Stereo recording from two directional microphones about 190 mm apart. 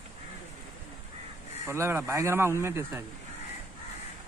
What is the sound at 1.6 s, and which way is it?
A man's voice, 15° right (ahead or behind).